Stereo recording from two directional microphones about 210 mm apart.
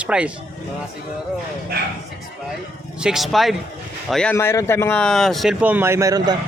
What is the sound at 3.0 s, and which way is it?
A man's voice, 5° right (ahead or behind).